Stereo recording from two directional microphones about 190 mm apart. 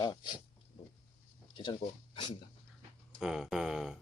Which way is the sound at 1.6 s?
25° left (ahead or behind).